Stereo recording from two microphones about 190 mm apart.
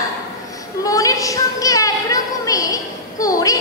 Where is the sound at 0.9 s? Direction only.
15° left (ahead or behind).